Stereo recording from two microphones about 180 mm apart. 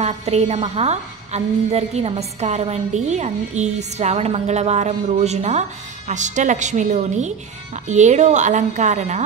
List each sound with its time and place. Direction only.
0.0 s a woman's voice: 35° right (ahead or behind)